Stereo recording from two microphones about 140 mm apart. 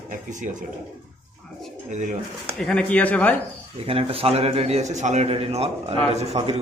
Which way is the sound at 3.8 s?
40° right (ahead or behind).